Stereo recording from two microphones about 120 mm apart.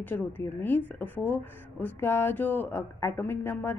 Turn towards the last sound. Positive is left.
turn(degrees=20)  # may be behind; listen again after turning